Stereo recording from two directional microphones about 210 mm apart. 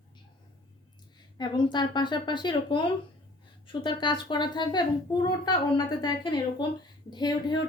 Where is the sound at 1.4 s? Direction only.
20° left (ahead or behind).